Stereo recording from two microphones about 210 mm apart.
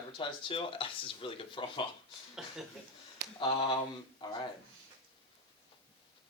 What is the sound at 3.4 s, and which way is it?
Speech, 25° left (ahead or behind).